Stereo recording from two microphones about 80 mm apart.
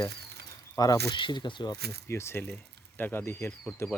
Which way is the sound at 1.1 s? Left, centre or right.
Left.